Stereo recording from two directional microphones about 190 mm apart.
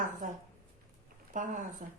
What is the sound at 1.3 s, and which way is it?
Speech, 45° right (ahead or behind).